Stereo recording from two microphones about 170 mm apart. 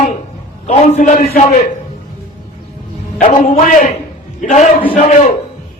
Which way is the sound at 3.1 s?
45° left (ahead or behind).